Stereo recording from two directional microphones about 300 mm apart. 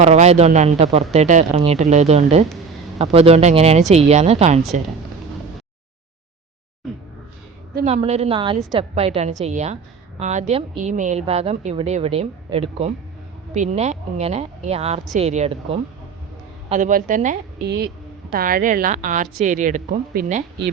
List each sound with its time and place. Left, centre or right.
0.0 s a woman's voice: right
6.8 s music: centre
7.8 s a woman's voice: right